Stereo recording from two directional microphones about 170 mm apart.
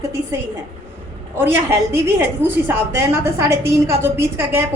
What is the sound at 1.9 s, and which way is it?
A woman's voice, 10° right (ahead or behind).